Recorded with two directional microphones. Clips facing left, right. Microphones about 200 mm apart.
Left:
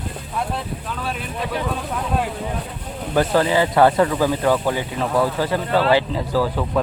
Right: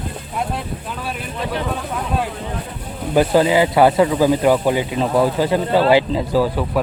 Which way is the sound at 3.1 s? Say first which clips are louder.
Right 3 dB; 15° right (ahead or behind).